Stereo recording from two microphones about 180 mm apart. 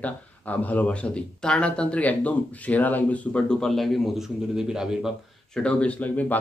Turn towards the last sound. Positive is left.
turn(degrees=10)  # may be behind; listen again after turning